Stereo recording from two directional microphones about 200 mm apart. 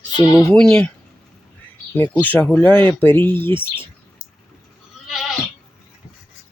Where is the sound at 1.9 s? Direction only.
10° left (ahead or behind).